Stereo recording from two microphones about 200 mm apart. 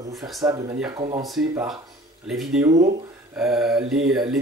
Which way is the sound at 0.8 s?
25° right (ahead or behind).